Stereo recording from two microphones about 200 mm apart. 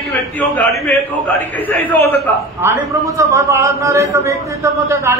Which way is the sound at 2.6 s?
15° right (ahead or behind).